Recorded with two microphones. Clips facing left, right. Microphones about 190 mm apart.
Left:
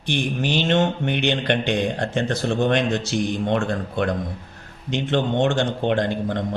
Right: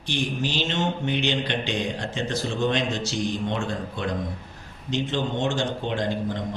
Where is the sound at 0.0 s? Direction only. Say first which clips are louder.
Left 3 dB; 60° left (ahead or behind).